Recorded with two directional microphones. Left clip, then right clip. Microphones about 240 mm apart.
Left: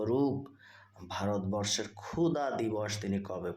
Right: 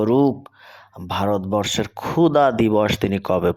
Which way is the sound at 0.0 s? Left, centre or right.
Right.